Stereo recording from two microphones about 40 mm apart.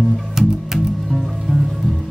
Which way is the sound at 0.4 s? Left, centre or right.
Centre.